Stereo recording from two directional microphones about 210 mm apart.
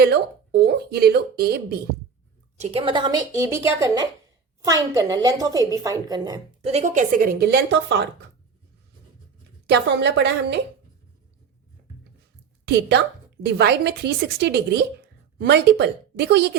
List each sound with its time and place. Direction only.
0.0 s a woman's voice: 50° right (ahead or behind)
2.6 s a woman's voice: 30° right (ahead or behind)
6.7 s a woman's voice: 35° right (ahead or behind); by 8.0 s 55° right (ahead or behind)
9.6 s a woman's voice: 55° right (ahead or behind)
12.6 s a woman's voice: 55° right (ahead or behind)